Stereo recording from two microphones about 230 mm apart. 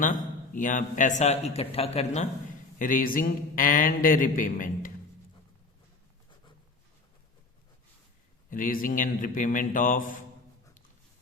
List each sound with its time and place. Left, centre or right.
0.0 s a man's voice: left
8.4 s a man's voice: left